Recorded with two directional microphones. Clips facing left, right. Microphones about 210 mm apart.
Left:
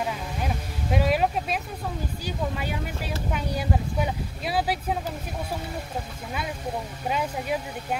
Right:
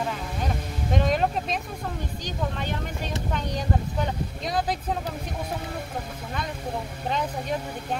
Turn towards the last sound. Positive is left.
turn(degrees=10)  # may be behind; listen again after turning